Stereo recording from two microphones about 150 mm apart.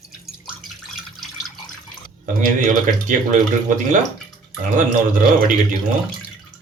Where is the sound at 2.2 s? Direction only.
60° right (ahead or behind).